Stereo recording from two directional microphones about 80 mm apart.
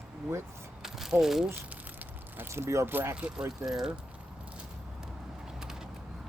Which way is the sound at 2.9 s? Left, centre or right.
Right.